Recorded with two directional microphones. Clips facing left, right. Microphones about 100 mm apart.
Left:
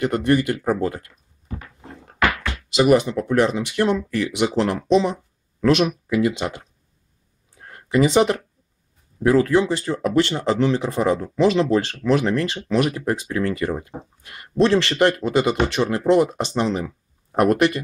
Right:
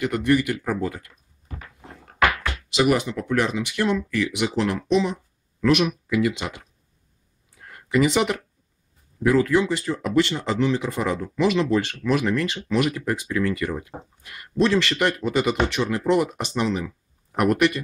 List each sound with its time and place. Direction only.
0.0 s speech: 35° left (ahead or behind)
2.7 s speech: 25° left (ahead or behind)
7.9 s speech: 25° left (ahead or behind)